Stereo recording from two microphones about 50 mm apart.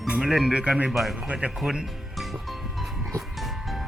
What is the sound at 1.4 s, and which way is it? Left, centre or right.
Speech, right.